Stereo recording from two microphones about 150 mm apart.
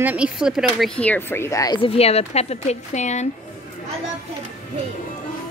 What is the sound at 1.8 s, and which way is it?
A woman's voice, 40° left (ahead or behind).